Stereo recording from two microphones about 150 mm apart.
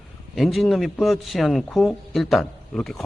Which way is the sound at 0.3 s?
Centre (ahead or behind).